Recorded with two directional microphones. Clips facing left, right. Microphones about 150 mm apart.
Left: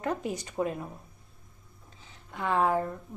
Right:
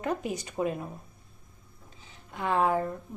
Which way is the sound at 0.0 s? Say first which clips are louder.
Right 1 dB; 20° right (ahead or behind).